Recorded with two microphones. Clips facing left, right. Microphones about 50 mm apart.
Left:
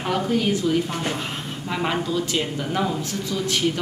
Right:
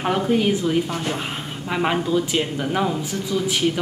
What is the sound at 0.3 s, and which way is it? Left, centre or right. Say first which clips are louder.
A woman's voice: right 1 dB; right.